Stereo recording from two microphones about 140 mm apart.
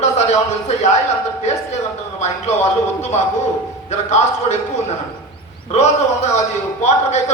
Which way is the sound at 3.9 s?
55° left (ahead or behind).